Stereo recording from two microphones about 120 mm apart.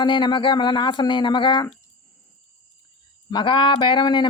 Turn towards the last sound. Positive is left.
turn(degrees=40)  # may be behind; listen again after turning